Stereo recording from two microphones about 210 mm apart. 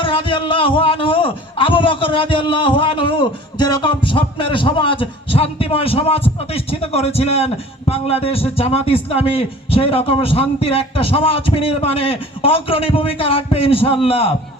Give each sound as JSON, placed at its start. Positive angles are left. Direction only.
{"t": 0.0, "sound": "a man's voice", "side_deg": 25}